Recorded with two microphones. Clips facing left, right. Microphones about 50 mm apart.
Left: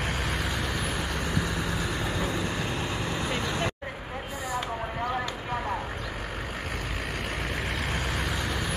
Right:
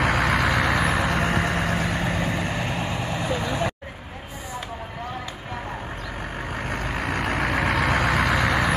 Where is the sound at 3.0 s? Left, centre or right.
Centre.